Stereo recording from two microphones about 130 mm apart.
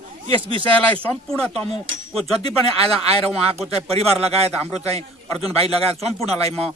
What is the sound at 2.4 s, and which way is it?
Speech, 50° right (ahead or behind).